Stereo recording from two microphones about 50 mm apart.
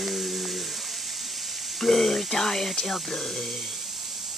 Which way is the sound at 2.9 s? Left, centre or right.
Centre.